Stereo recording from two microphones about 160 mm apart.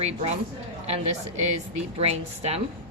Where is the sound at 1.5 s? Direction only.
40° right (ahead or behind).